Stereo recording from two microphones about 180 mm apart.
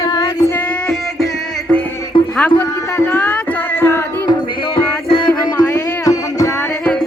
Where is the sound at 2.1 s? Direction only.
30° left (ahead or behind).